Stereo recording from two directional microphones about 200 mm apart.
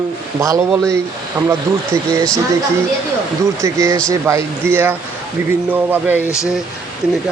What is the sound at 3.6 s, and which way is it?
Speech, 15° right (ahead or behind).